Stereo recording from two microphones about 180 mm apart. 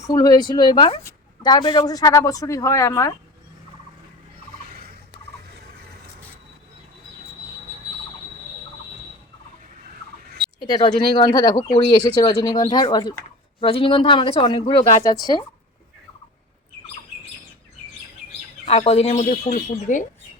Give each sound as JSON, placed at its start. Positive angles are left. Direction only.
{"t": 0.1, "sound": "a woman's voice", "side_deg": 20}
{"t": 10.6, "sound": "a woman's voice", "side_deg": 25}
{"t": 18.6, "sound": "speech", "side_deg": 35}